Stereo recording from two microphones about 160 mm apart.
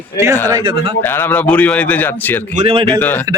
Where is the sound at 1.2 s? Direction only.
10° left (ahead or behind).